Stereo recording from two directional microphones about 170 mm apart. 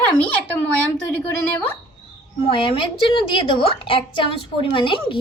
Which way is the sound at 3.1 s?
30° left (ahead or behind).